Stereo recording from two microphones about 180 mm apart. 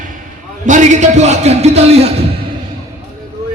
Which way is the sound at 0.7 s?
40° right (ahead or behind).